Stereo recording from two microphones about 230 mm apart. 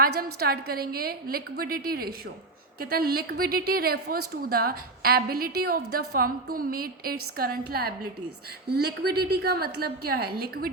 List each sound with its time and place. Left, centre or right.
0.0 s a woman's voice: right